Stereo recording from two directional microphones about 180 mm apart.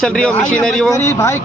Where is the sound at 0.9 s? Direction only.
15° left (ahead or behind).